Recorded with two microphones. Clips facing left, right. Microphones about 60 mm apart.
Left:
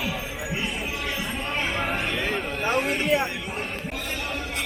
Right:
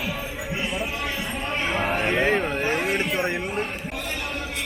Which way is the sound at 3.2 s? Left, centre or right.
Right.